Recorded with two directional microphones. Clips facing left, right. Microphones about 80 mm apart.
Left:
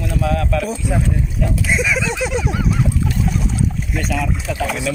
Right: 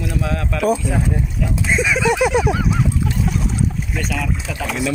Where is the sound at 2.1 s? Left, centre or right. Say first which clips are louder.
Right 5 dB; right.